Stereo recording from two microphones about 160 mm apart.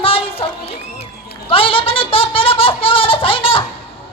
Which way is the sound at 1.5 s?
35° left (ahead or behind).